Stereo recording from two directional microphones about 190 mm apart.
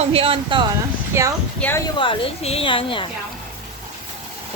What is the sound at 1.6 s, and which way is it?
Speech, 10° left (ahead or behind).